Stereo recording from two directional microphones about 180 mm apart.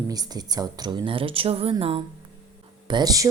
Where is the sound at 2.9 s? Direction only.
20° right (ahead or behind).